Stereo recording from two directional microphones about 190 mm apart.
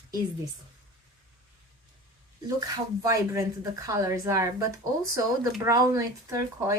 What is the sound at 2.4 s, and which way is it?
Speech, 20° right (ahead or behind).